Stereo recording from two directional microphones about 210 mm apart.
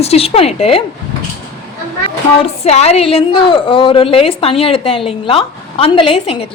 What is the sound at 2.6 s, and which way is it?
A woman's voice, 30° left (ahead or behind).